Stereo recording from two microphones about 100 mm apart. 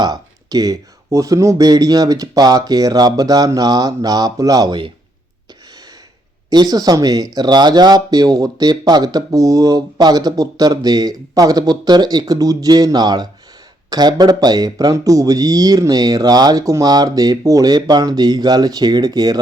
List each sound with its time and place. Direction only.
0.0 s speech: 40° right (ahead or behind)
6.5 s speech: 40° right (ahead or behind)